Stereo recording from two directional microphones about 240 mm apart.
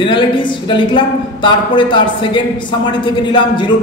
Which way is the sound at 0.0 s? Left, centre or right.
Centre.